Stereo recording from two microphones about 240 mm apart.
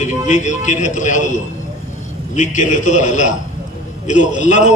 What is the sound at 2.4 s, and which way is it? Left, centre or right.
A man's voice, left.